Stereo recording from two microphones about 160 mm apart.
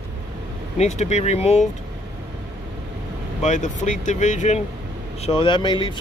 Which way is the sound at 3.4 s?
50° left (ahead or behind).